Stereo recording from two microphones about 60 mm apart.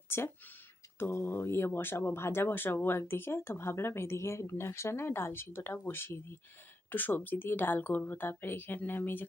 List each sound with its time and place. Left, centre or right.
0.1 s a woman's voice: left